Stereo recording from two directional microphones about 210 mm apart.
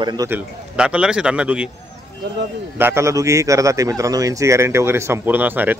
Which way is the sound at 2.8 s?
10° right (ahead or behind).